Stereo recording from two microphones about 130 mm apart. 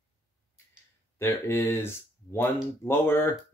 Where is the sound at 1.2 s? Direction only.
15° left (ahead or behind).